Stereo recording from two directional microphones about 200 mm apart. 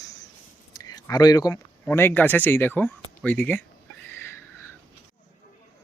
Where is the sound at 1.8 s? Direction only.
10° left (ahead or behind).